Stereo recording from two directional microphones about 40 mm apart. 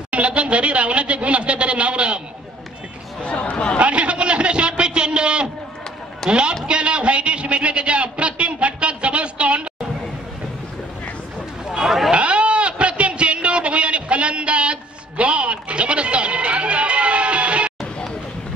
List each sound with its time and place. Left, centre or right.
0.1 s speech: right
3.2 s speech: left
3.7 s a man's voice: right
11.7 s chatter: centre
12.1 s a sound: right